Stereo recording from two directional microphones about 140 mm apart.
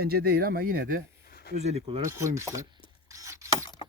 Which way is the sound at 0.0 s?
90° right.